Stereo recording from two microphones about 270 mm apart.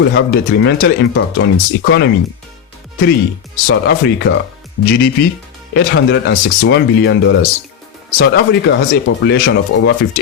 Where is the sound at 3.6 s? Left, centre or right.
Left.